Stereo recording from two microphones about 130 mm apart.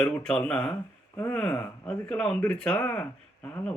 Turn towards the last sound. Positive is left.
turn(degrees=10)  # may be behind; listen again after turning